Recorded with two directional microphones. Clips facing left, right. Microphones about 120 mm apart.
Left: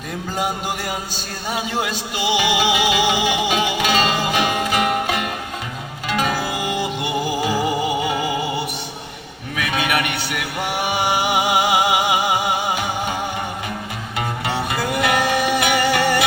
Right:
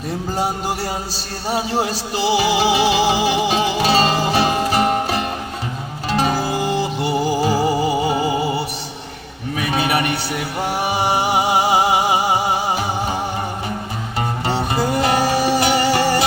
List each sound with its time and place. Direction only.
0.3 s a man's voice: 35° right (ahead or behind)
6.1 s music: 35° right (ahead or behind)
14.2 s music: 35° right (ahead or behind)